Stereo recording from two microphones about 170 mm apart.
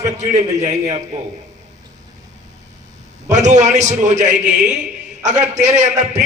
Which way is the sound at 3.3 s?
45° right (ahead or behind).